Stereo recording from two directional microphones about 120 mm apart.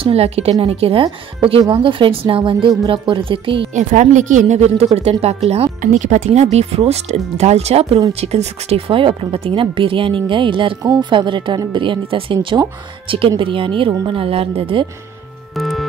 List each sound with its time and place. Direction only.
0.0 s a woman's voice: 60° right (ahead or behind)
3.7 s a woman's voice: 85° right; by 14.9 s 50° right (ahead or behind)
15.5 s music: centre (ahead or behind)